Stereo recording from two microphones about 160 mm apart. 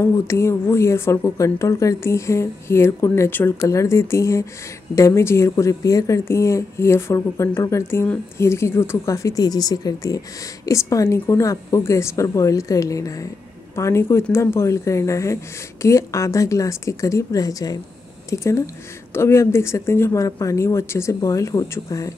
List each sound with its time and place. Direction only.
0.0 s a woman's voice: 15° left (ahead or behind)